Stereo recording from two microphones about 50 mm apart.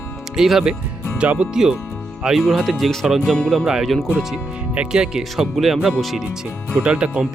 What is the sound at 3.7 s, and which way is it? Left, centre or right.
Speech, centre.